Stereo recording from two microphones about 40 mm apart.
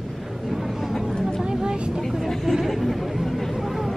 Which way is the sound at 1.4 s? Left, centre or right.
Centre.